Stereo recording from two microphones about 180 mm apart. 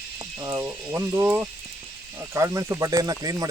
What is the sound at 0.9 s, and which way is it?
Speech, 15° right (ahead or behind).